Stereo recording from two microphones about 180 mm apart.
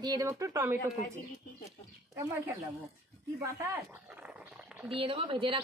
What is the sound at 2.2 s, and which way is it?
Speech, 15° right (ahead or behind).